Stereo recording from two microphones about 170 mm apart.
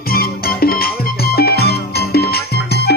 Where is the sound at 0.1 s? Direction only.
60° left (ahead or behind).